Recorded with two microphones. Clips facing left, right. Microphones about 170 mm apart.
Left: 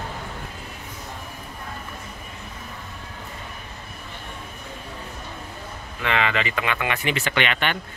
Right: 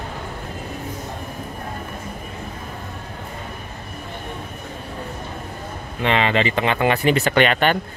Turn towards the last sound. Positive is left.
turn(degrees=-40)  # may be behind; listen again after turning